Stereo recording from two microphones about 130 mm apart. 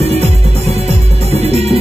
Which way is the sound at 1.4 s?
55° right (ahead or behind).